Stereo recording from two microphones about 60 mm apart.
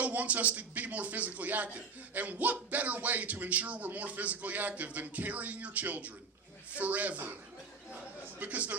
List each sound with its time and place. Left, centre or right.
0.0 s speech: right
8.4 s speech: right